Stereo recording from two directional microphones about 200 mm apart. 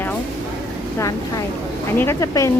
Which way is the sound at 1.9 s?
15° left (ahead or behind).